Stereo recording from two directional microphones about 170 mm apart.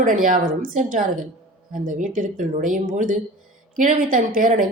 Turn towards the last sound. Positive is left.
turn(degrees=-50)  # may be behind; listen again after turning